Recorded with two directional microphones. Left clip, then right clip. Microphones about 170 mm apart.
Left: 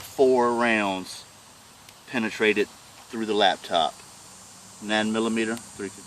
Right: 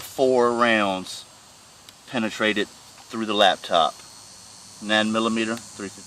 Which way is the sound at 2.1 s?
60° right (ahead or behind).